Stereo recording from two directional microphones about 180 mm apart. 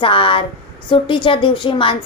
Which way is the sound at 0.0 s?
30° left (ahead or behind).